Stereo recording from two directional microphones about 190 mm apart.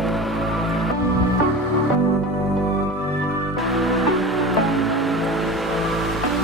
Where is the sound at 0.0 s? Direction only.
Centre (ahead or behind).